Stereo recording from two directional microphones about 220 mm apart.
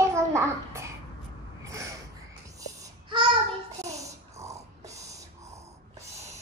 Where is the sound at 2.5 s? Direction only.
20° right (ahead or behind).